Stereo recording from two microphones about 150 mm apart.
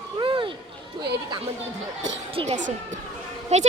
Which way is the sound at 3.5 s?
50° right (ahead or behind).